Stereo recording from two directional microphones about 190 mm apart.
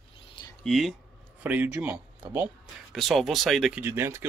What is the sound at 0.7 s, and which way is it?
Speech, centre (ahead or behind).